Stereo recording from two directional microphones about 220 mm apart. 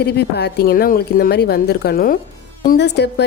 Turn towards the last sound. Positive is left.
turn(degrees=50)  # may be behind; listen again after turning